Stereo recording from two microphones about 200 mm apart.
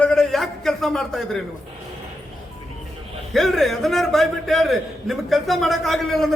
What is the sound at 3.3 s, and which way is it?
A man's voice, centre (ahead or behind).